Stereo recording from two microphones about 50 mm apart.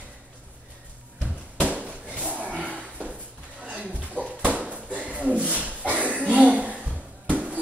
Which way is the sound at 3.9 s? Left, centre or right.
Right.